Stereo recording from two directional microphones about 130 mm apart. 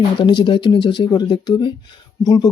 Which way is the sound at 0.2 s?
40° left (ahead or behind).